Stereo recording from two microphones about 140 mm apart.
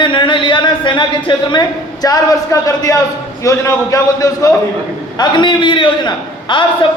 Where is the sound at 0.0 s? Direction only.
35° left (ahead or behind).